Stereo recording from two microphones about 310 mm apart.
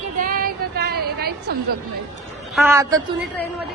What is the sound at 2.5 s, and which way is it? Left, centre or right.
Speech, centre.